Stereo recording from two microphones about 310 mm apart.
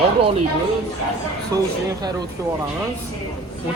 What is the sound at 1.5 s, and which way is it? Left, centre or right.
Speech, centre.